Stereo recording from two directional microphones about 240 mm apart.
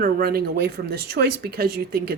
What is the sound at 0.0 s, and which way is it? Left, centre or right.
Speech, right.